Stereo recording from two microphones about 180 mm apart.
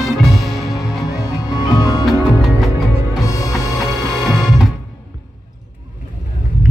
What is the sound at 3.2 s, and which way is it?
Music, 20° left (ahead or behind).